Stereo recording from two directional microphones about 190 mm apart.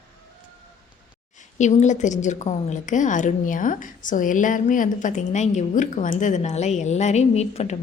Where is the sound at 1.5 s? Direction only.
40° left (ahead or behind).